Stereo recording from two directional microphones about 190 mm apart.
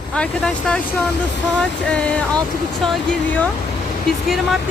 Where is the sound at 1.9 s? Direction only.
5° left (ahead or behind).